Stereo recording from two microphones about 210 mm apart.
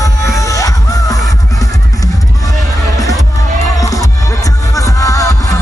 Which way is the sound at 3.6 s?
15° left (ahead or behind).